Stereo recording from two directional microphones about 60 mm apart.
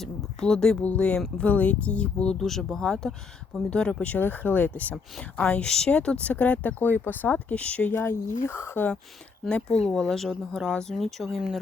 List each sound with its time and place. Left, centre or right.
0.3 s speech: centre
2.4 s speech: centre
4.0 s speech: left
5.6 s speech: centre; by 8.9 s left
9.5 s speech: centre
9.8 s speech: centre
11.3 s speech: centre